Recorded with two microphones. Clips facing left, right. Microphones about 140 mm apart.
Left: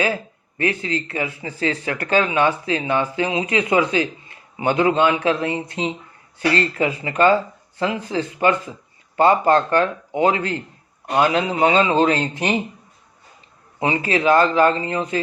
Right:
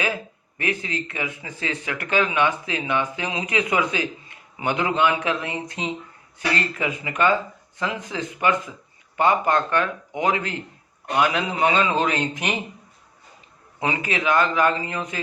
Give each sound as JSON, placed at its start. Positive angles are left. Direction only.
{"t": 0.0, "sound": "speech", "side_deg": 30}
{"t": 13.7, "sound": "speech", "side_deg": 30}